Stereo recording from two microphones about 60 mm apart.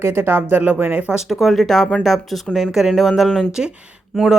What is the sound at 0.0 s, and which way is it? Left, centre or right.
Speech, right.